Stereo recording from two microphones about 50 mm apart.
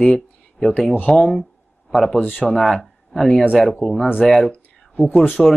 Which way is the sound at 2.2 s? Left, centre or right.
Left.